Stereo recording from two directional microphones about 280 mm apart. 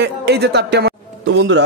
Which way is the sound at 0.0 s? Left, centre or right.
Right.